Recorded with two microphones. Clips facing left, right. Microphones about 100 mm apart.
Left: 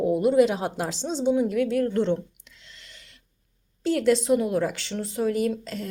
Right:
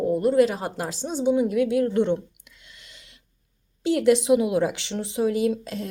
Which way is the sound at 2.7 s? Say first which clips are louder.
Even; 15° right (ahead or behind).